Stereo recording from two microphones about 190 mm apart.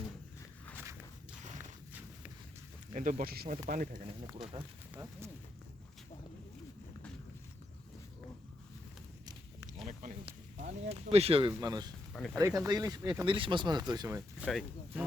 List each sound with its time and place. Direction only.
2.9 s speech: 40° right (ahead or behind)
4.5 s speech: 15° right (ahead or behind)
10.2 s speech: 35° right (ahead or behind)
12.1 s speech: 5° left (ahead or behind)
12.4 s speech: 15° right (ahead or behind)
14.4 s speech: 5° right (ahead or behind)